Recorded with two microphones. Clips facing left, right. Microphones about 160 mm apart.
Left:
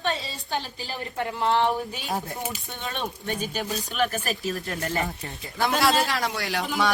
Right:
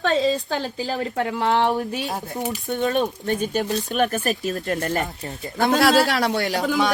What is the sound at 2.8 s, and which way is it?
Speech, 40° right (ahead or behind).